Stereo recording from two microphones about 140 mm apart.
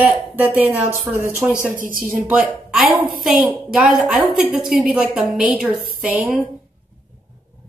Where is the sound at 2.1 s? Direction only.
10° right (ahead or behind).